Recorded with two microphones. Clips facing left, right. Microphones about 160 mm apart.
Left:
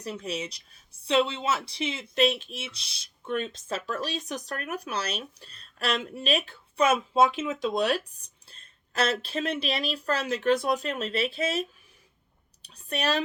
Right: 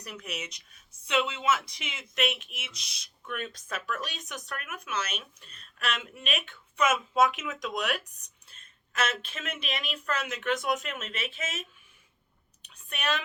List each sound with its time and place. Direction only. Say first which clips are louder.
0.0 s speech: left 6 dB; 30° left (ahead or behind)